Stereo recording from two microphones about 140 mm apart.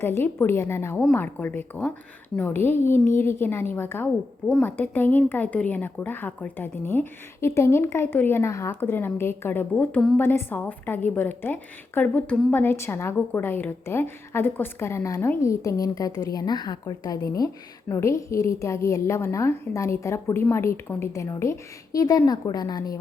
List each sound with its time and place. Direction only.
0.0 s a woman's voice: 15° left (ahead or behind)